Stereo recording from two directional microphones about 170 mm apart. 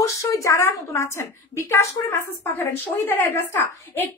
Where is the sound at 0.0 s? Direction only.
20° left (ahead or behind).